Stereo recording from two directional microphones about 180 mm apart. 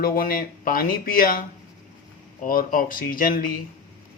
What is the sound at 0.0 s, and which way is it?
Speech, 55° left (ahead or behind).